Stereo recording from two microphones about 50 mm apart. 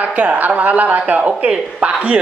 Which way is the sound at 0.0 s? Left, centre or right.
Right.